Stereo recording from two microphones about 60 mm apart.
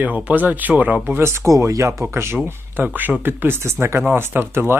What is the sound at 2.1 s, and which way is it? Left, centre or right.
Speech, right.